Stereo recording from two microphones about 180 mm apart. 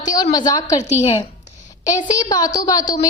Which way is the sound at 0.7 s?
40° left (ahead or behind).